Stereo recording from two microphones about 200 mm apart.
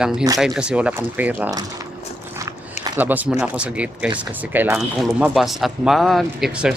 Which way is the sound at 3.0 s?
10° right (ahead or behind).